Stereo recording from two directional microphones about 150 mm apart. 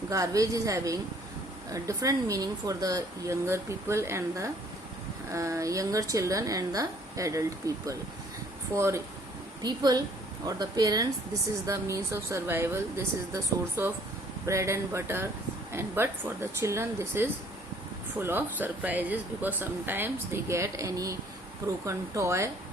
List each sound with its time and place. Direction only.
0.1 s speech: 20° right (ahead or behind)